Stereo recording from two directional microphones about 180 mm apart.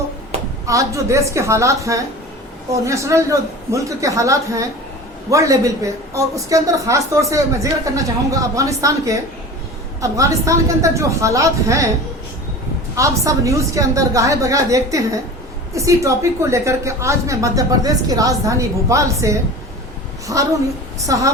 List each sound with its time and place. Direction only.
0.7 s a woman's voice: 15° right (ahead or behind)
13.0 s a woman's voice: 20° right (ahead or behind)